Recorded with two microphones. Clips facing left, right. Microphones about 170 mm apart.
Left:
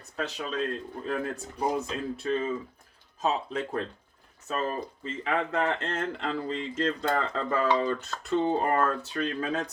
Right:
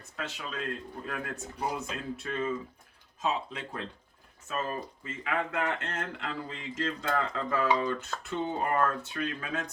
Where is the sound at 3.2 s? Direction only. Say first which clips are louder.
Left 4 dB; 40° left (ahead or behind).